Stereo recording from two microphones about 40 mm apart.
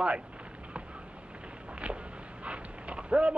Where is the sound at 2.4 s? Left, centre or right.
Right.